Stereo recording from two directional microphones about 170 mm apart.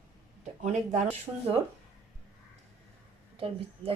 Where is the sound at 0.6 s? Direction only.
40° right (ahead or behind).